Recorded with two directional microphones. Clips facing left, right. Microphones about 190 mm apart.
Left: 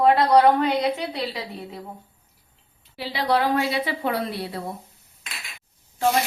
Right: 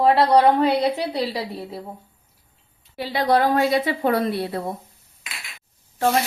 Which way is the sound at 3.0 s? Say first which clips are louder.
Right 3 dB; 45° right (ahead or behind).